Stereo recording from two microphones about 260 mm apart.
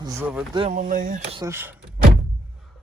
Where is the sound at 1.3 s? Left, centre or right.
Centre.